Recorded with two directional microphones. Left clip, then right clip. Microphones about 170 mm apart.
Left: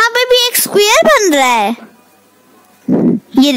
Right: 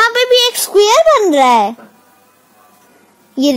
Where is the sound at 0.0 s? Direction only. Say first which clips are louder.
Even; 25° left (ahead or behind); by 1.2 s 50° left (ahead or behind).